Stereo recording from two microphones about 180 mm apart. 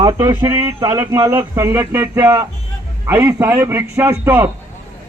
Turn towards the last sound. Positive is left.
turn(degrees=-10)  # may be behind; listen again after turning